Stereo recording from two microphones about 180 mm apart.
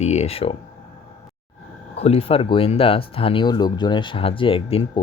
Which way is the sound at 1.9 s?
35° left (ahead or behind).